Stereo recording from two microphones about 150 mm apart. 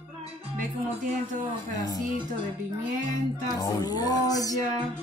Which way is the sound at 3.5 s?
25° left (ahead or behind).